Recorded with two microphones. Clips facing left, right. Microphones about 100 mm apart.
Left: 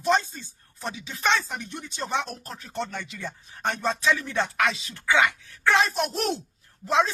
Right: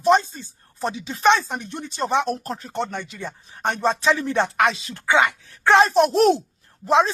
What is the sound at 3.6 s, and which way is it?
Speech, 30° right (ahead or behind).